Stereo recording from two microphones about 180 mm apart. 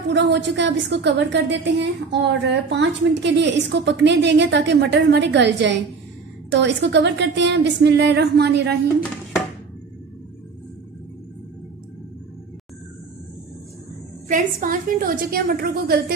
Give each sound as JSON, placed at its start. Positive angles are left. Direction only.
{"t": 0.1, "sound": "a woman's voice", "side_deg": -75}
{"t": 14.2, "sound": "a woman's voice", "side_deg": -45}